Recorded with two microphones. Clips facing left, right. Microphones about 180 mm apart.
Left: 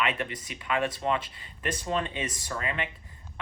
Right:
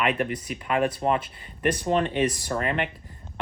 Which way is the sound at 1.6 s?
60° right (ahead or behind).